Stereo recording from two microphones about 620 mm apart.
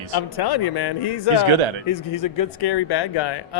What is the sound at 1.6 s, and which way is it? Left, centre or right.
Speech, right.